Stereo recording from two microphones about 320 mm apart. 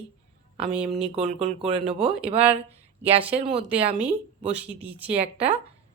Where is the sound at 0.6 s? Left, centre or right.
Centre.